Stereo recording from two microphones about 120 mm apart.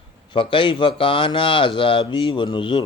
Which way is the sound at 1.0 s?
45° left (ahead or behind).